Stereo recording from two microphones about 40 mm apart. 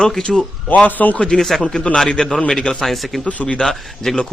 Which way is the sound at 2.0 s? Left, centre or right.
Centre.